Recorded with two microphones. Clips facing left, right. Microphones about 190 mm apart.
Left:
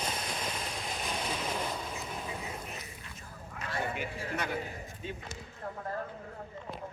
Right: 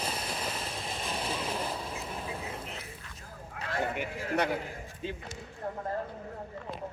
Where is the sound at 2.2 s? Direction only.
5° right (ahead or behind).